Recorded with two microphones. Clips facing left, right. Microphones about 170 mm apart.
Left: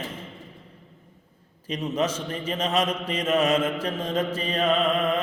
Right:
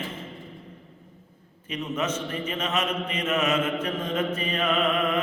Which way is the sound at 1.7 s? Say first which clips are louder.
Left 3 dB; 35° left (ahead or behind).